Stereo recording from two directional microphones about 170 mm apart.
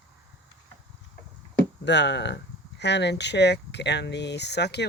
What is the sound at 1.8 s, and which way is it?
Speech, 90° left.